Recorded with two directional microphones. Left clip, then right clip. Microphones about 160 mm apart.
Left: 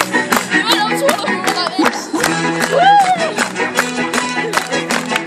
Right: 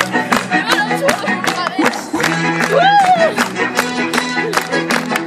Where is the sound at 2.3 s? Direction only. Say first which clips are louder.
Right 1 dB; 5° left (ahead or behind).